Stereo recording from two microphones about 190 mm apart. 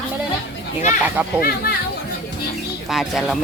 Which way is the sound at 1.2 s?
10° right (ahead or behind).